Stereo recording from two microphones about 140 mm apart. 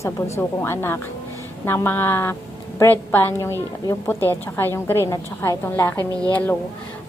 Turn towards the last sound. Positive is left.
turn(degrees=10)  # may be behind; listen again after turning